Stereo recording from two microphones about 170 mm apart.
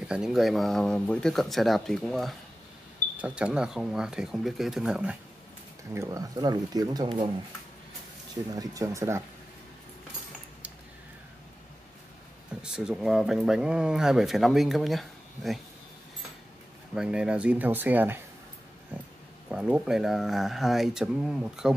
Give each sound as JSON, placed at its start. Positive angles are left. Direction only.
{"t": 0.1, "sound": "speech", "side_deg": -5}
{"t": 5.9, "sound": "speech", "side_deg": -20}
{"t": 8.5, "sound": "speech", "side_deg": -20}
{"t": 12.6, "sound": "speech", "side_deg": -5}
{"t": 16.9, "sound": "speech", "side_deg": -5}
{"t": 19.5, "sound": "speech", "side_deg": -5}